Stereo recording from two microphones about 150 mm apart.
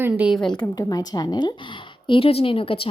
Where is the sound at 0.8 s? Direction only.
25° left (ahead or behind).